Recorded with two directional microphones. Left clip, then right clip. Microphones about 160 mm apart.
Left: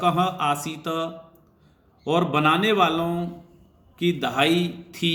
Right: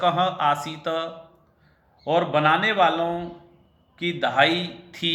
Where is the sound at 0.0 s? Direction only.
25° left (ahead or behind).